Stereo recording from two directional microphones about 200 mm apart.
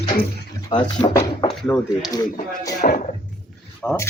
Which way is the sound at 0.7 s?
20° left (ahead or behind).